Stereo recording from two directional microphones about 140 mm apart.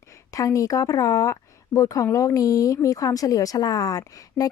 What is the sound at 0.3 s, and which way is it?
Speech, 25° left (ahead or behind).